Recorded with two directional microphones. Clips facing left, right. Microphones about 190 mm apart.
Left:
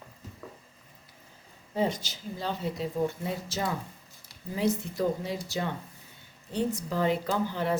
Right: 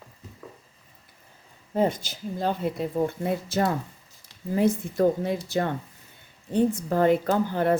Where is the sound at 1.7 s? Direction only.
50° right (ahead or behind).